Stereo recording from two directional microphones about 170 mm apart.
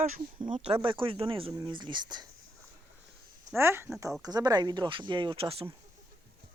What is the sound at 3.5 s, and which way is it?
Speech, 15° right (ahead or behind).